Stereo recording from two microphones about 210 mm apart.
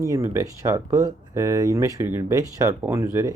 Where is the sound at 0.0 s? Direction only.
15° right (ahead or behind).